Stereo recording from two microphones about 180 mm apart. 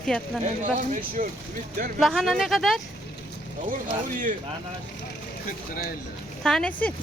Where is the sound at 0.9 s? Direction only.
45° right (ahead or behind).